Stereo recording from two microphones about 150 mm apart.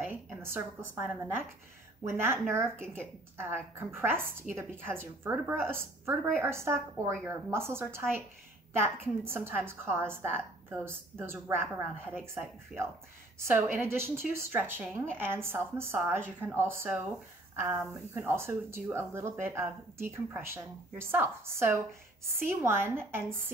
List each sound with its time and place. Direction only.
0.0 s a woman's voice: 15° right (ahead or behind)
13.5 s speech: 15° right (ahead or behind)